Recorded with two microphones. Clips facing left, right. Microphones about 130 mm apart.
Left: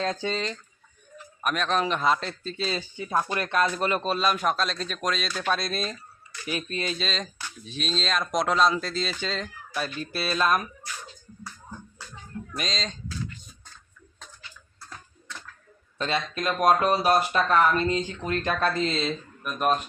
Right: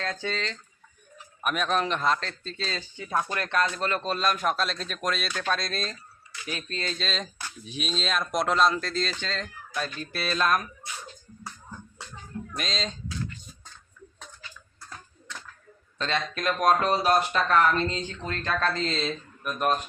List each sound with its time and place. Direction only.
0.0 s speech: 20° left (ahead or behind)
1.5 s a man's voice: 5° right (ahead or behind); by 7.1 s 10° left (ahead or behind)
7.1 s a man's voice: 5° right (ahead or behind)
12.5 s a man's voice: centre (ahead or behind)
16.0 s speech: 5° left (ahead or behind)